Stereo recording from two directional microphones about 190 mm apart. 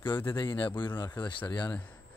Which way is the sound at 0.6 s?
25° left (ahead or behind).